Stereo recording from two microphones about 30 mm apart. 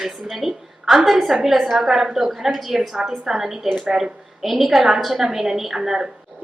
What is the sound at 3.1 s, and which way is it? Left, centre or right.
A woman's voice, centre.